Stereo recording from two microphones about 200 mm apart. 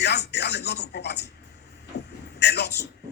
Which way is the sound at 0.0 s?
55° left (ahead or behind).